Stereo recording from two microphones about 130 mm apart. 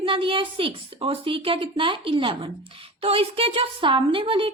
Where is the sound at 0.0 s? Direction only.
40° right (ahead or behind).